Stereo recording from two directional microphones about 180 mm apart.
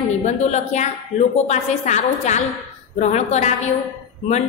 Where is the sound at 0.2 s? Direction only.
40° left (ahead or behind).